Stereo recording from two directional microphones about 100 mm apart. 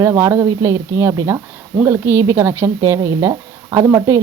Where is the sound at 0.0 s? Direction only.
25° right (ahead or behind).